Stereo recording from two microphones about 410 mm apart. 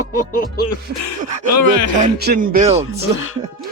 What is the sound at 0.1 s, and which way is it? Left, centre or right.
Music, left.